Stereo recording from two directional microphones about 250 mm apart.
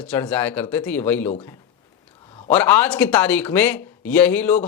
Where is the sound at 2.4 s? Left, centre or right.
Centre.